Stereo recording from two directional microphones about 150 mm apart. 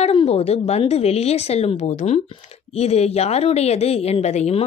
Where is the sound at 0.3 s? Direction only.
45° left (ahead or behind).